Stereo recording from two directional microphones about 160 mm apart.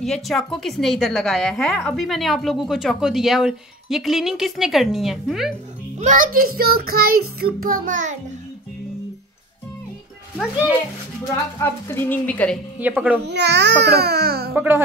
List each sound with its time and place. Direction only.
0.0 s a woman's voice: centre (ahead or behind)
5.9 s child singing: 55° right (ahead or behind)
11.6 s speech: 15° left (ahead or behind)
12.7 s speech: 10° right (ahead or behind)
13.2 s speech: 90° right
14.5 s speech: 10° right (ahead or behind)